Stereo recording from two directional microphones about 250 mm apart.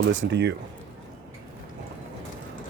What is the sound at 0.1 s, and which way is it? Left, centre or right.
Speech, right.